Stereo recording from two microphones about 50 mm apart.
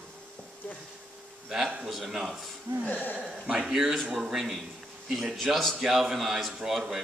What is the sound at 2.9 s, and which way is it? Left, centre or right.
Speech, left.